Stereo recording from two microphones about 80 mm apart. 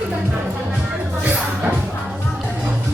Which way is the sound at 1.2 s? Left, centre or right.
Right.